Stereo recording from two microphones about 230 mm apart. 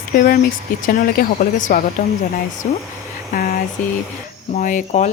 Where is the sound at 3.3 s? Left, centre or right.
Left.